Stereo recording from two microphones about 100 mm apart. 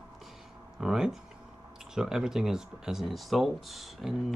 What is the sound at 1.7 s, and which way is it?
Speech, 5° right (ahead or behind).